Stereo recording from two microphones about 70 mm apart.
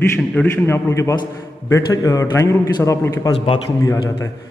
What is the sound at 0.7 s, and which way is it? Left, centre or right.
A man's voice, left.